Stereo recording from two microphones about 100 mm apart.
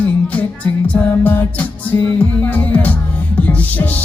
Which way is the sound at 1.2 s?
20° left (ahead or behind).